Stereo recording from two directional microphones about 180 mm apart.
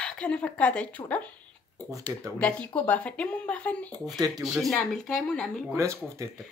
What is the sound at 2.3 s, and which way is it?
A woman's voice, 10° left (ahead or behind).